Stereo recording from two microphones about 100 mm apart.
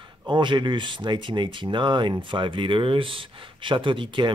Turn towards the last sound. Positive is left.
turn(degrees=-55)  # may be behind; listen again after turning